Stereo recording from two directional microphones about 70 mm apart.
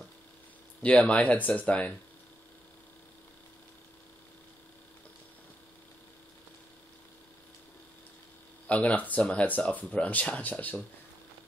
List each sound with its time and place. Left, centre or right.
0.8 s speech: centre
8.6 s speech: centre